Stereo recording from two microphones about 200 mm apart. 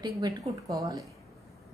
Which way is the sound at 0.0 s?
15° right (ahead or behind).